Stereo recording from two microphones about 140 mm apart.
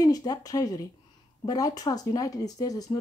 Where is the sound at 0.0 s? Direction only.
25° left (ahead or behind).